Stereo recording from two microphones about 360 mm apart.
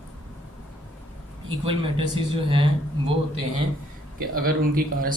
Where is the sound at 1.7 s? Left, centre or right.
Centre.